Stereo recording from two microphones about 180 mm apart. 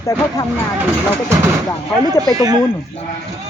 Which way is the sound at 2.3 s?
20° right (ahead or behind).